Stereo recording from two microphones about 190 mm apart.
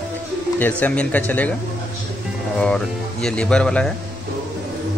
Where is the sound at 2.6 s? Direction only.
5° left (ahead or behind).